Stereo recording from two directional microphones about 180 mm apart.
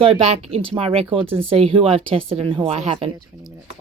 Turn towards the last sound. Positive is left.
turn(degrees=-35)  # may be behind; listen again after turning